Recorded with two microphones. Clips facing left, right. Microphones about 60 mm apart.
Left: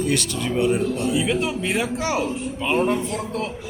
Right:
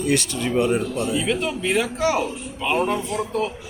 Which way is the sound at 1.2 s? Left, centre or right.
Centre.